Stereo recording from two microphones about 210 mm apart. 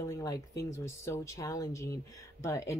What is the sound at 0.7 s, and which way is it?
A woman's voice, 10° left (ahead or behind).